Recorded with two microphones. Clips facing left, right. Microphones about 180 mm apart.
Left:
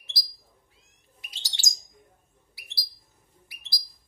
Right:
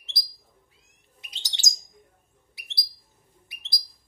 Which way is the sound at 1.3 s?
20° right (ahead or behind).